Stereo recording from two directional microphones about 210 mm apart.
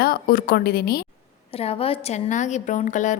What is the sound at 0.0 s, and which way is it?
A woman's voice, 45° left (ahead or behind).